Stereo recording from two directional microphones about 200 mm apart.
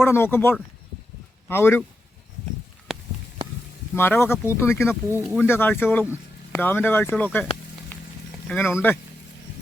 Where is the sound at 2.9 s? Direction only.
Centre (ahead or behind).